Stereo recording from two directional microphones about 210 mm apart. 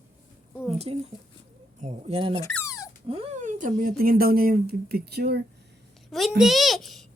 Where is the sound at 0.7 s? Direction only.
30° right (ahead or behind).